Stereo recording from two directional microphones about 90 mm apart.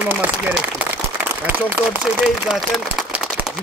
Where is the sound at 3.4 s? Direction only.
20° right (ahead or behind).